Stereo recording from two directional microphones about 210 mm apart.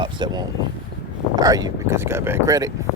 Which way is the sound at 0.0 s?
20° right (ahead or behind).